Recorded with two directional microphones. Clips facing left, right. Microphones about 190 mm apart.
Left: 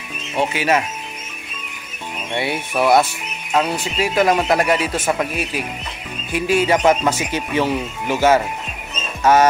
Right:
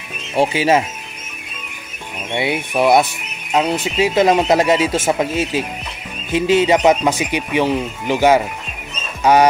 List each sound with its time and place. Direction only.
0.4 s speech: 30° right (ahead or behind)
2.3 s speech: 20° right (ahead or behind)